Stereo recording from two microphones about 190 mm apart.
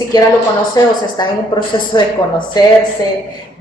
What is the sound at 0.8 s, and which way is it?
A woman's voice, 20° left (ahead or behind).